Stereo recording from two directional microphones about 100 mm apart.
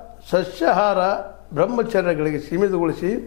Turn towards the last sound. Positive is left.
turn(degrees=20)  # may be behind; listen again after turning